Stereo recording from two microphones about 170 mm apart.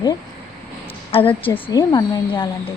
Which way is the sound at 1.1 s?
35° left (ahead or behind).